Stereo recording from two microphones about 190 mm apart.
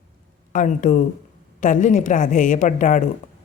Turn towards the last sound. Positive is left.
turn(degrees=40)  # may be behind; listen again after turning